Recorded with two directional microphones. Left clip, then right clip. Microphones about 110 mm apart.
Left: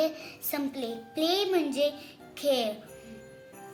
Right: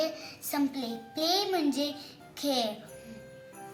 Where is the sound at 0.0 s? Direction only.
90° left.